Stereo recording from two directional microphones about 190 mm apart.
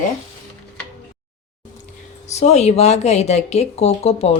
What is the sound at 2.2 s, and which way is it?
Speech, 35° left (ahead or behind).